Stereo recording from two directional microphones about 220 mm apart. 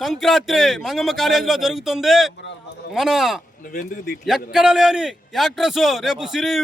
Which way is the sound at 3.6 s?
35° left (ahead or behind).